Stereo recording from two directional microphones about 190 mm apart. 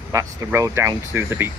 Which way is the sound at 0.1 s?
15° right (ahead or behind).